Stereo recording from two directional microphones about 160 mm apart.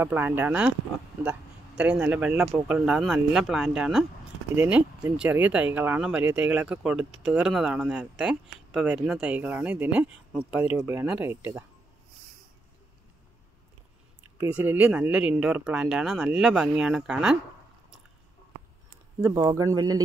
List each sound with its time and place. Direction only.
0.0 s speech: 15° right (ahead or behind)
1.8 s speech: 5° right (ahead or behind)
14.4 s speech: 10° right (ahead or behind)
19.2 s speech: 20° right (ahead or behind)